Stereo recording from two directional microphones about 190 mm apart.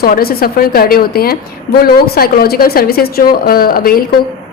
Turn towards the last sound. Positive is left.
turn(degrees=50)  # may be behind; listen again after turning